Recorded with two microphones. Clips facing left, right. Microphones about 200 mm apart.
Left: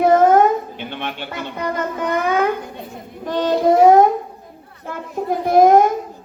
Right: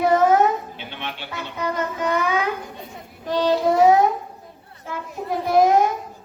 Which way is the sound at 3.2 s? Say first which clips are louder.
Left 3 dB; 55° left (ahead or behind).